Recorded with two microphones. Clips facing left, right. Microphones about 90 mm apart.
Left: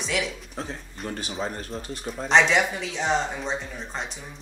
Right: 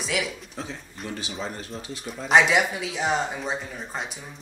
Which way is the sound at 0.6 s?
40° left (ahead or behind).